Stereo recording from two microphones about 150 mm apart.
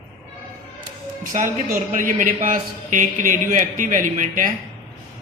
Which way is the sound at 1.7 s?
65° right (ahead or behind).